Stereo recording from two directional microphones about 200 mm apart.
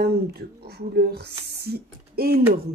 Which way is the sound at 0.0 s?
50° right (ahead or behind).